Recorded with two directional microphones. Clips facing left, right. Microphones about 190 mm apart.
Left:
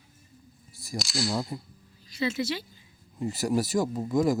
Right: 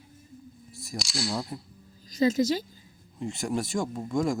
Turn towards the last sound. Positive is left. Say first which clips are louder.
# left 3 dB
turn(degrees=5)  # may be behind; listen again after turning